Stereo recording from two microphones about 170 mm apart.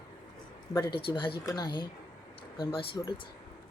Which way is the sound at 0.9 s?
30° left (ahead or behind).